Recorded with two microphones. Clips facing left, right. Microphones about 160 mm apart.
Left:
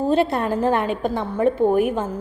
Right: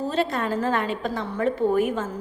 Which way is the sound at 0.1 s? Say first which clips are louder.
Left 6 dB; 60° left (ahead or behind).